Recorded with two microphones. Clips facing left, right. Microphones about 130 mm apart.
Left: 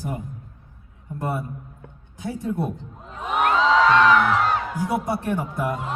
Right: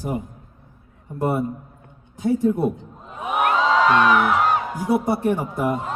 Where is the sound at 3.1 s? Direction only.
10° right (ahead or behind).